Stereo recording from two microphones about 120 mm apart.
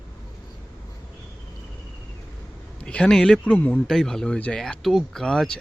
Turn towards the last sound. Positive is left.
turn(degrees=5)  # may be behind; listen again after turning